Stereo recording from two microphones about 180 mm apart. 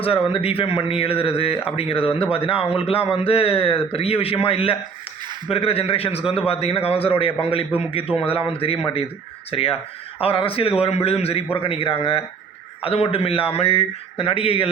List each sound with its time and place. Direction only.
0.0 s speech: 30° left (ahead or behind)